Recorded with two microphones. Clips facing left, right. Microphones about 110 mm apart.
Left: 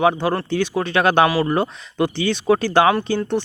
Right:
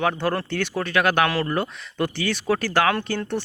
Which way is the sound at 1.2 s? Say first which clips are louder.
Left 5 dB; 10° left (ahead or behind).